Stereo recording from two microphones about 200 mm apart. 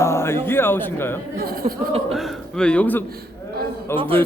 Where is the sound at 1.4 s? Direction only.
45° right (ahead or behind).